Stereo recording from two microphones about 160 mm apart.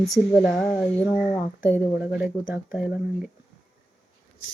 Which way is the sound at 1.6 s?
10° right (ahead or behind).